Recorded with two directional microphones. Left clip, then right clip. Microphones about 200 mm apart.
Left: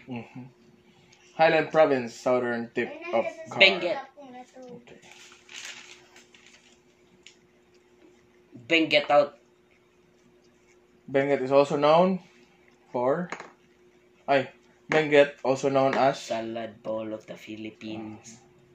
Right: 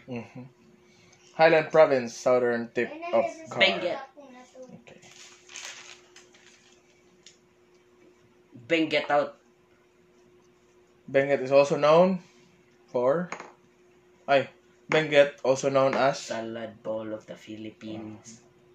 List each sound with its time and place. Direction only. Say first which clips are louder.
1.3 s speech: right 2 dB; 20° right (ahead or behind)
8.6 s speech: left 3 dB; 30° right (ahead or behind)
11.1 s speech: right 1 dB; 25° right (ahead or behind)
14.9 s speech: left 1 dB; 25° right (ahead or behind)